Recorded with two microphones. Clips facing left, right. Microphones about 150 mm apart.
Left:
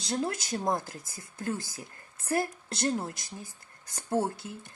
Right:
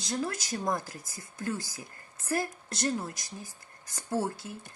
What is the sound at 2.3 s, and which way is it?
A woman's voice, 25° left (ahead or behind).